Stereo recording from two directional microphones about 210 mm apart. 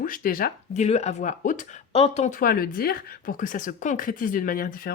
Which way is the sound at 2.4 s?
45° left (ahead or behind).